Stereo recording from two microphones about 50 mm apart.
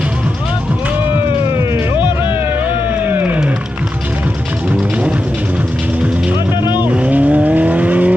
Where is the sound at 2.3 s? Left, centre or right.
Right.